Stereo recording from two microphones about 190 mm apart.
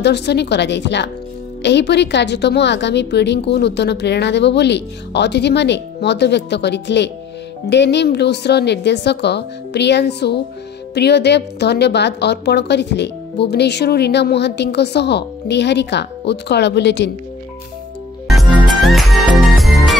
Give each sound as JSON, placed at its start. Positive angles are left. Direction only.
{"t": 0.0, "sound": "a woman's voice", "side_deg": 60}
{"t": 18.3, "sound": "music", "side_deg": 0}